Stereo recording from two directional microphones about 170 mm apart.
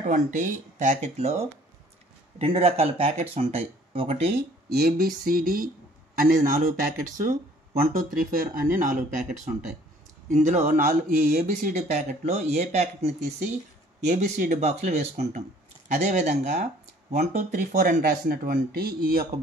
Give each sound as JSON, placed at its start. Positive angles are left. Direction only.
{"t": 0.0, "sound": "speech", "side_deg": -45}
{"t": 2.3, "sound": "speech", "side_deg": -35}
{"t": 4.7, "sound": "speech", "side_deg": -65}
{"t": 14.1, "sound": "speech", "side_deg": -40}